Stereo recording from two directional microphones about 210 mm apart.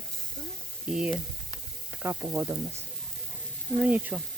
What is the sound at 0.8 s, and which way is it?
Speech, 5° right (ahead or behind).